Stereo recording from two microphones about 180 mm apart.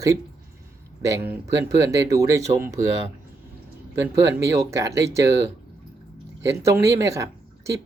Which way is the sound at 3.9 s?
15° right (ahead or behind).